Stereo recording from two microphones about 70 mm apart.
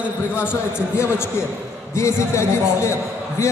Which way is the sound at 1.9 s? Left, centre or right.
Left.